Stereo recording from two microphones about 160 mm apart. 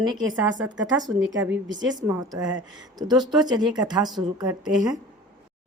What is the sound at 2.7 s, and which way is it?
A woman's voice, 25° right (ahead or behind).